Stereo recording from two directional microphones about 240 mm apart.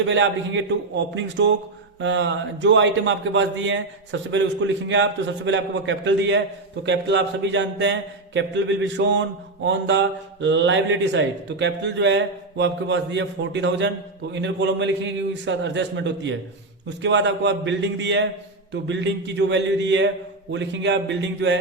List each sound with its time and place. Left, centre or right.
0.0 s speech: right